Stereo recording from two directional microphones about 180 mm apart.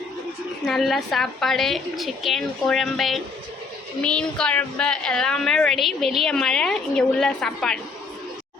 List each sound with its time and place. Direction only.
0.6 s a woman's voice: centre (ahead or behind)